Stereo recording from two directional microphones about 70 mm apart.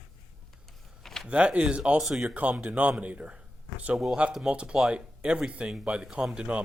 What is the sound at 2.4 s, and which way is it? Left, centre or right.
Speech, right.